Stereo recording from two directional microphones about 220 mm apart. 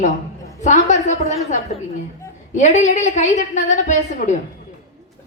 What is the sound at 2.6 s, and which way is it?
A woman's voice, 35° left (ahead or behind).